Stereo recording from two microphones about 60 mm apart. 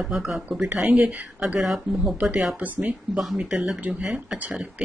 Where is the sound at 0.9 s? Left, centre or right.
Right.